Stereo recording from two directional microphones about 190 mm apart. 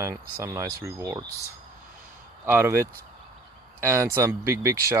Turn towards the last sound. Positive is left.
turn(degrees=-15)  # may be behind; listen again after turning